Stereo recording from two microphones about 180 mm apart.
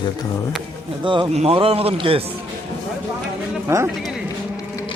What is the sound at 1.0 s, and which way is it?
A man's voice, 25° right (ahead or behind).